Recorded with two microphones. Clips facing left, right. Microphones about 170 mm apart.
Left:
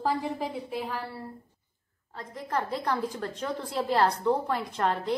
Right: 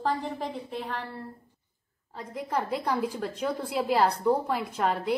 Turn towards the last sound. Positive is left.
turn(degrees=-5)  # may be behind; listen again after turning